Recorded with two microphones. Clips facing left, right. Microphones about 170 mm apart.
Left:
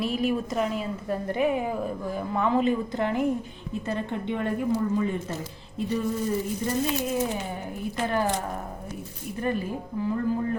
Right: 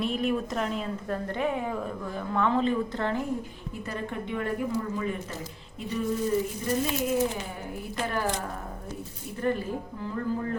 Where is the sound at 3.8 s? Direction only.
25° left (ahead or behind).